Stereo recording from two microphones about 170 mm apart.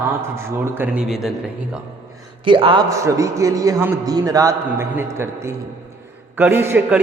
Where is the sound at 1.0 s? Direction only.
Centre (ahead or behind).